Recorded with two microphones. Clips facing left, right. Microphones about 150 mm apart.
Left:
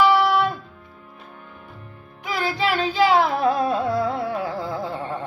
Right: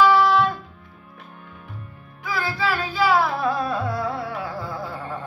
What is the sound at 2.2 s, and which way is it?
Music, 20° left (ahead or behind).